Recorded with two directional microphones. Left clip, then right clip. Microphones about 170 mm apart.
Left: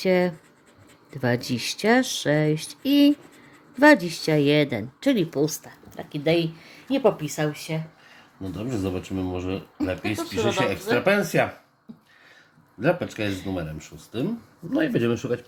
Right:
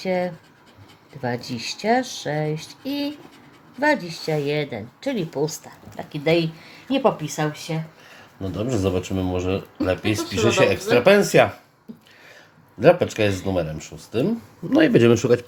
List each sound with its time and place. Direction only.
0.0 s speech: 50° left (ahead or behind); by 7.8 s 30° left (ahead or behind)
8.4 s speech: 15° right (ahead or behind)
12.8 s speech: 30° right (ahead or behind)
14.7 s speech: 30° right (ahead or behind)